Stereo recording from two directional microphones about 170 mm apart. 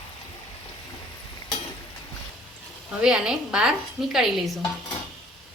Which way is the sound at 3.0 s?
5° right (ahead or behind).